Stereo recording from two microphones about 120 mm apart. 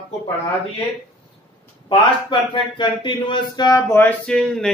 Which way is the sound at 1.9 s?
45° left (ahead or behind).